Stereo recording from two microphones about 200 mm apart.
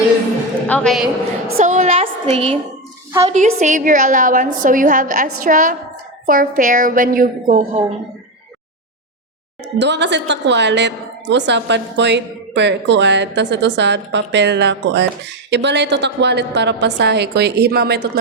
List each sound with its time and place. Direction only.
0.7 s a man's voice: 5° left (ahead or behind)
1.5 s a woman's voice: 40° right (ahead or behind)
9.7 s a woman's voice: 60° right (ahead or behind)